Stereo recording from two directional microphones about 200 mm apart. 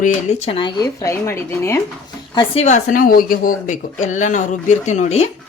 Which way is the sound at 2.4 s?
30° left (ahead or behind).